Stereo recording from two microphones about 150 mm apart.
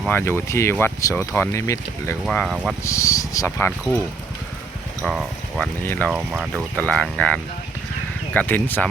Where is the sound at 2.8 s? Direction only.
20° left (ahead or behind).